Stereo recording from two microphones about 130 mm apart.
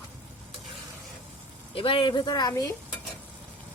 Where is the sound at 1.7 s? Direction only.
45° left (ahead or behind); by 2.7 s 30° left (ahead or behind).